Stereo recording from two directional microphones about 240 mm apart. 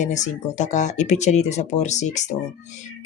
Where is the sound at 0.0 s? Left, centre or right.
Left.